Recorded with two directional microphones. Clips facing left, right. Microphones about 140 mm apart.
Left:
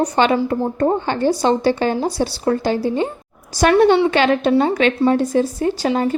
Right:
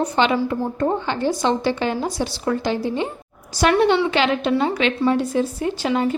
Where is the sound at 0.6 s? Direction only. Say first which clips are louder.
Left 4 dB; 30° left (ahead or behind).